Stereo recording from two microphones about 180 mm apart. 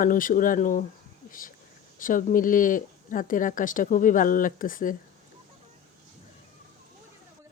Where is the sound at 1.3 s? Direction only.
50° left (ahead or behind).